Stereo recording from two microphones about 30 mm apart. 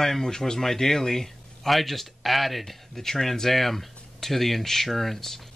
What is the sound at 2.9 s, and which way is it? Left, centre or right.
Speech, centre.